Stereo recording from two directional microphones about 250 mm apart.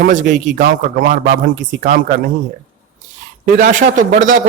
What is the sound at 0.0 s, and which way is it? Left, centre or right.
A man's voice, right.